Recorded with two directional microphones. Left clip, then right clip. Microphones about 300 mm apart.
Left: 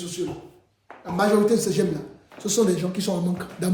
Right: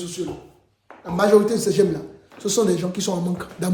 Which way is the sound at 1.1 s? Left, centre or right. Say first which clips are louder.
Right 3 dB; centre.